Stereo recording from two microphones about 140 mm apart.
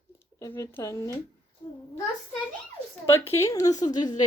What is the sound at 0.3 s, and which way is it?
Speech, 25° left (ahead or behind).